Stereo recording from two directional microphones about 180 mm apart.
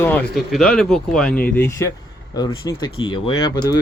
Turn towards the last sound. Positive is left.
turn(degrees=25)  # may be behind; listen again after turning